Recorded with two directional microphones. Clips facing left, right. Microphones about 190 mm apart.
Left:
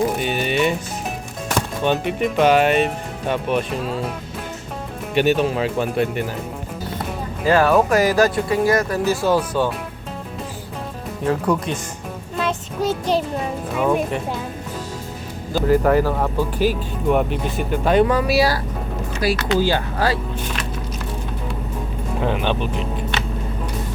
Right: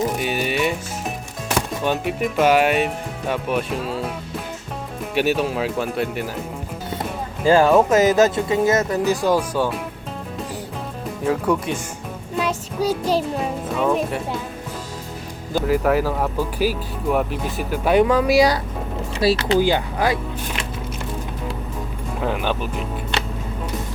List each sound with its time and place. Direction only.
0.2 s music: 5° right (ahead or behind)
1.5 s speech: 5° right (ahead or behind)
5.1 s speech: 5° right (ahead or behind)
7.4 s speech: 25° right (ahead or behind); by 9.7 s 10° right (ahead or behind)
11.3 s speech: 5° right (ahead or behind)
12.4 s child singing: 5° right (ahead or behind)
13.7 s speech: 5° left (ahead or behind)
15.6 s speech: 5° right (ahead or behind)
19.2 s speech: 25° right (ahead or behind)
19.5 s speech: 15° right (ahead or behind)
22.2 s speech: 5° right (ahead or behind)